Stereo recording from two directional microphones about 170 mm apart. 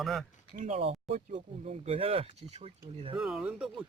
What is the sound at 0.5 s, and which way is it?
Speech, 45° right (ahead or behind).